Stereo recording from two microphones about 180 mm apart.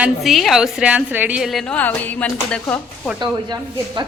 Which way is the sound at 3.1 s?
25° right (ahead or behind).